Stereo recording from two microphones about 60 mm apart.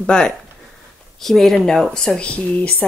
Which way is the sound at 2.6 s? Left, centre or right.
Left.